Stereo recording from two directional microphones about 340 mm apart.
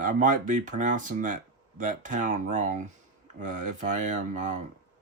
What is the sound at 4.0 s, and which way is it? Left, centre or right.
Speech, right.